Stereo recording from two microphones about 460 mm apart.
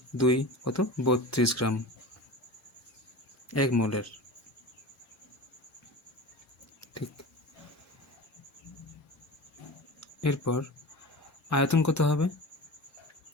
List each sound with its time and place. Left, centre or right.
0.2 s speech: left
3.5 s speech: left
10.0 s speech: left